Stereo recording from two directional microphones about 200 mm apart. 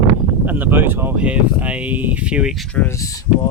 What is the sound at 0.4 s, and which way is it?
Speech, 10° right (ahead or behind).